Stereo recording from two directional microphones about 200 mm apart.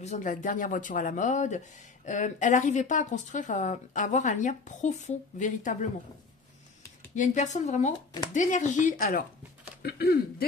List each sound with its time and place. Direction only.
0.0 s speech: 35° left (ahead or behind)
7.2 s speech: 35° left (ahead or behind)
9.8 s a sound: 50° left (ahead or behind)